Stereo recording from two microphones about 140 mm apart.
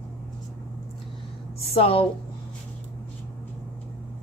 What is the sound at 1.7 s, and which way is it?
Speech, 45° left (ahead or behind).